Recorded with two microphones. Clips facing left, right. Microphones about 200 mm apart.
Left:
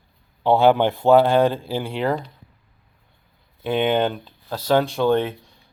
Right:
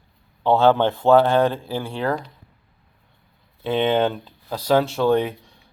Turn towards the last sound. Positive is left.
turn(degrees=-5)  # may be behind; listen again after turning